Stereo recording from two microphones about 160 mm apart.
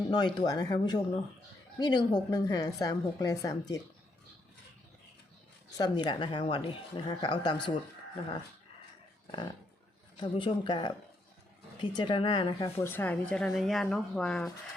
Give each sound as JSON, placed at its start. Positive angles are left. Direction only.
{"t": 0.1, "sound": "a woman's voice", "side_deg": 25}
{"t": 5.7, "sound": "a woman's voice", "side_deg": 25}
{"t": 10.2, "sound": "a woman's voice", "side_deg": 30}
{"t": 12.6, "sound": "speech", "side_deg": 15}